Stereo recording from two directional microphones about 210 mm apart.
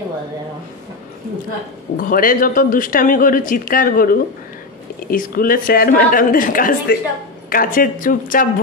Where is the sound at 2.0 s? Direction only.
40° left (ahead or behind).